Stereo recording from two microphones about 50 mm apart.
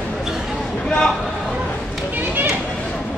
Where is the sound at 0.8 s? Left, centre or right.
Centre.